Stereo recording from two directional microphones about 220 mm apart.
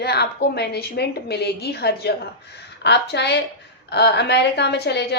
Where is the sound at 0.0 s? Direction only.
50° left (ahead or behind).